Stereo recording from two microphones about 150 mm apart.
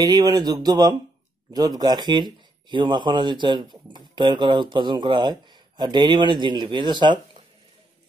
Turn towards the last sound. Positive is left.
turn(degrees=-30)  # may be behind; listen again after turning